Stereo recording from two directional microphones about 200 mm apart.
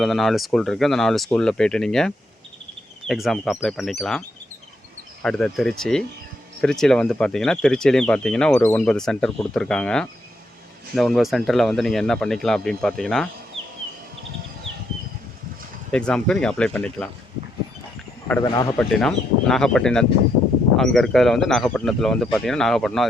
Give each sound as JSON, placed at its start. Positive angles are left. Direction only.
{"t": 0.0, "sound": "speech", "side_deg": 0}
{"t": 5.2, "sound": "speech", "side_deg": 5}
{"t": 15.9, "sound": "speech", "side_deg": 5}
{"t": 18.4, "sound": "a man's voice", "side_deg": 20}
{"t": 18.8, "sound": "speech", "side_deg": 5}